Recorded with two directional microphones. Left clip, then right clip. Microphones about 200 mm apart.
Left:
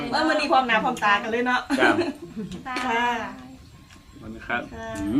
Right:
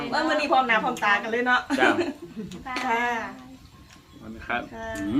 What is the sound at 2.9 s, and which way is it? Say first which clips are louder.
Speech: left 1 dB; 5° left (ahead or behind).